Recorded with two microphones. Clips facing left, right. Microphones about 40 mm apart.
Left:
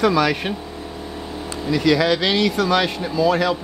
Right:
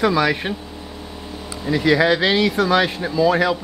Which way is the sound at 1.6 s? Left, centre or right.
Centre.